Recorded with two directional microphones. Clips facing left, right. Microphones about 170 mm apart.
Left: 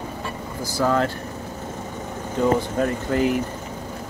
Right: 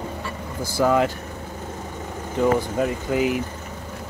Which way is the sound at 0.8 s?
10° right (ahead or behind).